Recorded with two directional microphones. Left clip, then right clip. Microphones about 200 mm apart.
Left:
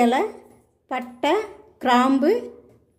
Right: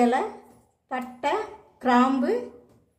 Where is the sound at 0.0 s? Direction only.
45° left (ahead or behind).